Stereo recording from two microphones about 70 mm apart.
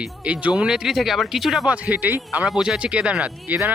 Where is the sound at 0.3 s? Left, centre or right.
Centre.